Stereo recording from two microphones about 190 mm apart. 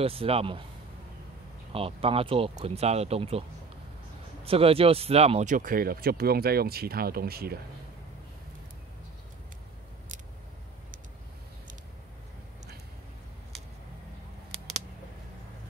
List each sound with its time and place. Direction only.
0.0 s speech: 30° right (ahead or behind)
1.7 s speech: 30° right (ahead or behind)
4.5 s speech: 30° right (ahead or behind); by 7.5 s 55° right (ahead or behind)